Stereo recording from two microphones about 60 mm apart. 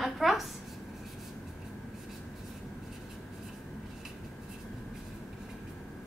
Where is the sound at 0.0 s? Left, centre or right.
Centre.